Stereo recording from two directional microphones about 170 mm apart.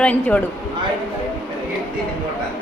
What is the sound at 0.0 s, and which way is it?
Speech, 5° left (ahead or behind).